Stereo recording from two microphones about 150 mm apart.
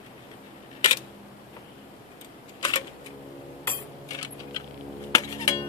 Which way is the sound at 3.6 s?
25° left (ahead or behind).